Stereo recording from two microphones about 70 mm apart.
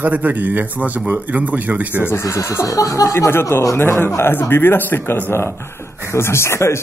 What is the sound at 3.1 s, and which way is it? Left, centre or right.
Speech, left.